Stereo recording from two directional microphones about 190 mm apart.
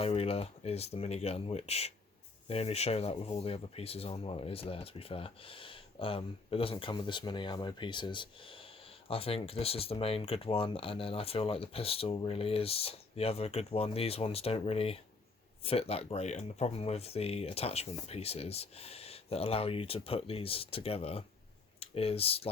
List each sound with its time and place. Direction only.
0.0 s speech: 30° left (ahead or behind)